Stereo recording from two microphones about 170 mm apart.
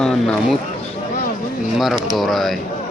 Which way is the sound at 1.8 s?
Centre (ahead or behind).